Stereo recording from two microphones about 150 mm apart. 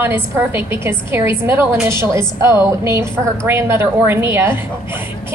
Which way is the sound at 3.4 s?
15° right (ahead or behind).